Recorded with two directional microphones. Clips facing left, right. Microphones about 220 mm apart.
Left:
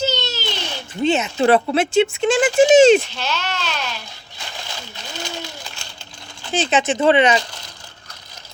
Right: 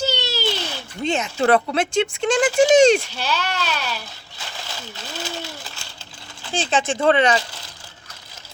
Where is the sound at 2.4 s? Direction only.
20° left (ahead or behind).